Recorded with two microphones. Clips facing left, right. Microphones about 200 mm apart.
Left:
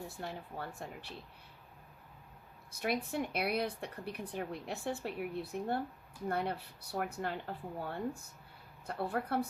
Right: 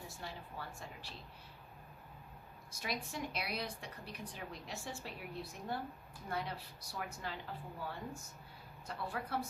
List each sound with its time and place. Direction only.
0.1 s speech: 55° left (ahead or behind)
2.7 s speech: 60° left (ahead or behind)